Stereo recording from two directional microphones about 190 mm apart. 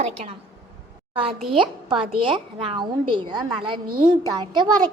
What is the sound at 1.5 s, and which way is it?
A woman's voice, 25° right (ahead or behind).